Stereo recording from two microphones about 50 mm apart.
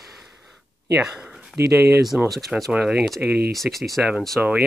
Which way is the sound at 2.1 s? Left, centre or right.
Right.